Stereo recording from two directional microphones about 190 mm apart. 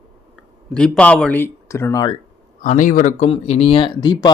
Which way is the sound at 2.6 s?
45° left (ahead or behind).